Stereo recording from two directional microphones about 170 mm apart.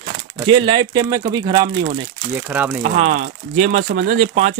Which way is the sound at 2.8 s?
45° right (ahead or behind).